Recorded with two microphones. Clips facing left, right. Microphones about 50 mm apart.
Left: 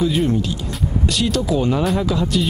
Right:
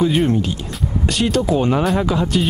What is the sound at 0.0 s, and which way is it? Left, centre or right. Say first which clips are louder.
Speech: right 2 dB; right.